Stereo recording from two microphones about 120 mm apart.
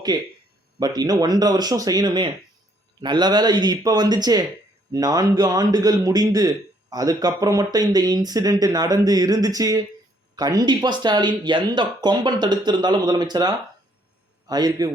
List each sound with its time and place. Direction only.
0.8 s a man's voice: 35° right (ahead or behind)